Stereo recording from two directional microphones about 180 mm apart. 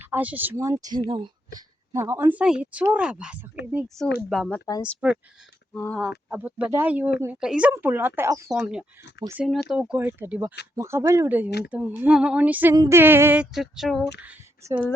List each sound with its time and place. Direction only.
0.1 s speech: 10° right (ahead or behind); by 1.3 s 30° right (ahead or behind)
1.5 s speech: 15° right (ahead or behind); by 4.6 s 5° left (ahead or behind)
4.6 s speech: 15° left (ahead or behind)
6.0 s speech: 5° right (ahead or behind)